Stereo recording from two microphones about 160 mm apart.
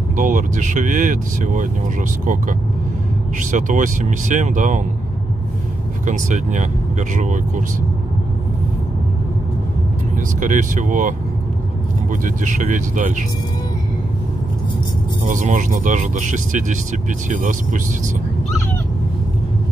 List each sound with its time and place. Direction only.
0.2 s speech: 55° right (ahead or behind)
3.3 s speech: 55° right (ahead or behind)
6.0 s speech: 50° right (ahead or behind)
10.4 s speech: 55° right (ahead or behind)
15.2 s speech: 55° right (ahead or behind)